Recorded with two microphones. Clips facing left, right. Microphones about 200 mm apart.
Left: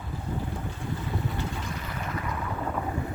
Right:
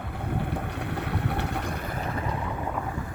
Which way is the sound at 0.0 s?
65° right (ahead or behind).